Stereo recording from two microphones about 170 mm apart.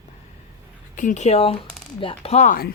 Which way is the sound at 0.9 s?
45° left (ahead or behind).